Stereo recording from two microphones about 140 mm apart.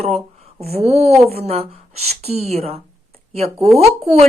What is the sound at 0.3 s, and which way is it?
Speech, 45° right (ahead or behind).